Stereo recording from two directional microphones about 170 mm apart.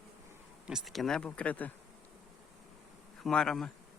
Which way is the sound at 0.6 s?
Centre (ahead or behind).